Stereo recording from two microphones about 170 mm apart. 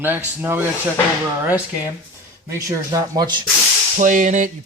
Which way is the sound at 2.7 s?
20° right (ahead or behind).